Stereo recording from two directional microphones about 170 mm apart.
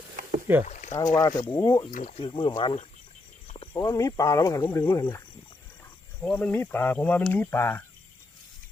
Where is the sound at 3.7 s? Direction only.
20° left (ahead or behind).